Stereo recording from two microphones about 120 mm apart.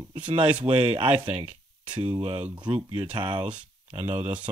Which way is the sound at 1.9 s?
45° right (ahead or behind).